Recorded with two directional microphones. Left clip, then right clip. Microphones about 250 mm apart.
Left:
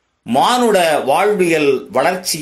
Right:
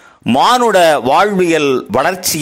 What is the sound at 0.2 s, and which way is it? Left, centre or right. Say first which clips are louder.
Speech: right 3 dB; right.